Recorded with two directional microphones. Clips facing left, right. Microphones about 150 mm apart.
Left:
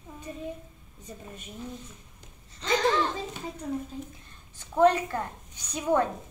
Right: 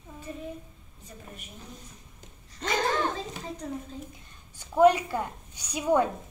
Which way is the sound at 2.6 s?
50° right (ahead or behind).